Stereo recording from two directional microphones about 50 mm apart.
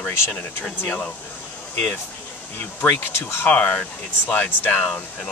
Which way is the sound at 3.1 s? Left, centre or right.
Left.